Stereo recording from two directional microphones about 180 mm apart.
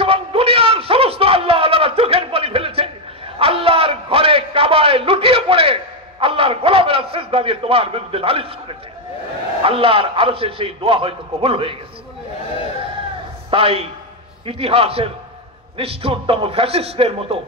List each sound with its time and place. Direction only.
0.0 s a sound: 30° right (ahead or behind)
9.6 s a man's voice: 30° right (ahead or behind)
13.5 s a man's voice: 30° right (ahead or behind)